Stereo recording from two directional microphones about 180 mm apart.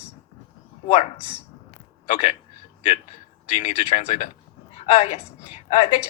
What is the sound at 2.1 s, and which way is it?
Speech, 35° left (ahead or behind).